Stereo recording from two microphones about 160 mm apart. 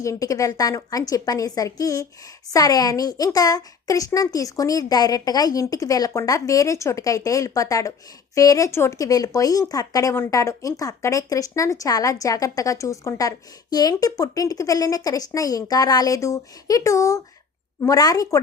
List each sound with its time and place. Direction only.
0.0 s a woman's voice: 20° left (ahead or behind)